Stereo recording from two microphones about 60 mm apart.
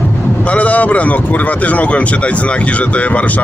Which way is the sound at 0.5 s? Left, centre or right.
Left.